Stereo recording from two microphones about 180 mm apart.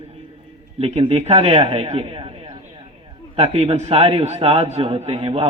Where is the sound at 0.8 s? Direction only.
35° right (ahead or behind).